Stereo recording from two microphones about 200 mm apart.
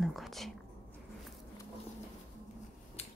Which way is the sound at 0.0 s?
Centre (ahead or behind).